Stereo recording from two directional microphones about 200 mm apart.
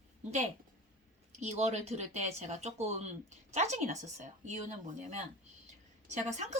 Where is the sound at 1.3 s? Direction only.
35° right (ahead or behind).